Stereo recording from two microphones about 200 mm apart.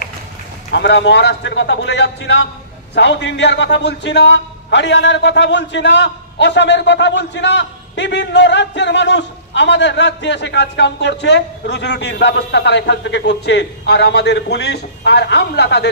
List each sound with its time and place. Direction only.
0.7 s a man's voice: 60° left (ahead or behind)